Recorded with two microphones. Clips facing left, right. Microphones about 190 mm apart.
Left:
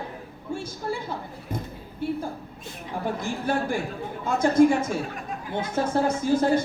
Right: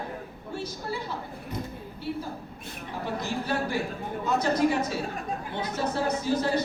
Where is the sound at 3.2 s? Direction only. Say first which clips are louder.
Left 1 dB; 50° left (ahead or behind).